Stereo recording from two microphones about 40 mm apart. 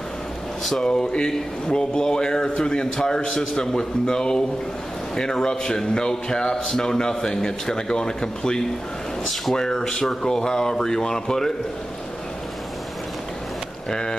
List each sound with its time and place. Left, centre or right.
0.8 s a man's voice: centre
13.8 s speech: centre